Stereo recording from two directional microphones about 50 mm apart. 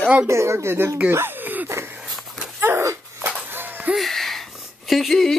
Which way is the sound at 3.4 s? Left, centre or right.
Right.